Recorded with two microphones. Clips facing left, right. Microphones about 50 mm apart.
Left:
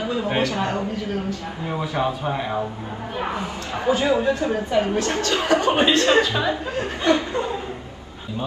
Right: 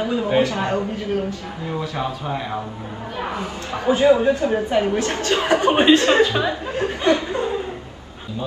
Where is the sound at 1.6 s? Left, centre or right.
Centre.